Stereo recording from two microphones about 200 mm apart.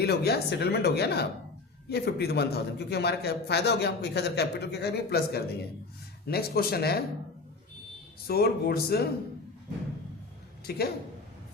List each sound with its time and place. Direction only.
0.0 s a man's voice: 55° left (ahead or behind)
8.3 s speech: 50° left (ahead or behind)
10.7 s speech: 50° left (ahead or behind)